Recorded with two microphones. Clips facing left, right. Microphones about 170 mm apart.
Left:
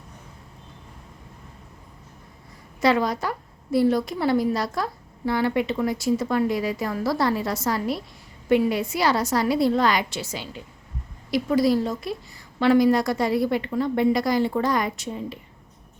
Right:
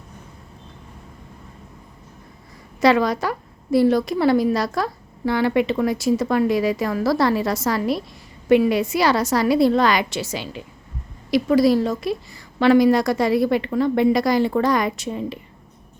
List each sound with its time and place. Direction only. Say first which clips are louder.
2.8 s a woman's voice: right 4 dB; 85° right